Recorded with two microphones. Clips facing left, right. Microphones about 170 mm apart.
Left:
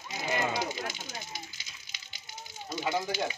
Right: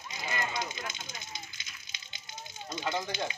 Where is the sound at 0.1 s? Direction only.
75° left (ahead or behind).